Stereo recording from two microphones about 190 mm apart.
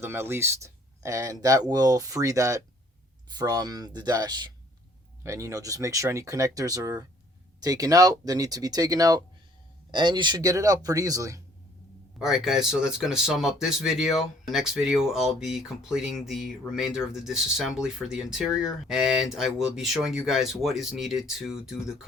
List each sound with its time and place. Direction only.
0.0 s speech: 10° right (ahead or behind)
12.2 s speech: centre (ahead or behind)